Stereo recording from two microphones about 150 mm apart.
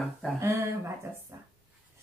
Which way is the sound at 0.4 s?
20° right (ahead or behind).